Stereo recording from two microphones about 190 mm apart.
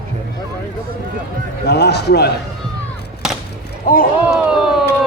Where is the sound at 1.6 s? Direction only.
60° left (ahead or behind).